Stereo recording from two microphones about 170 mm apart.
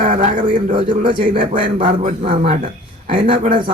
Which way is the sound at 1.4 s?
50° right (ahead or behind).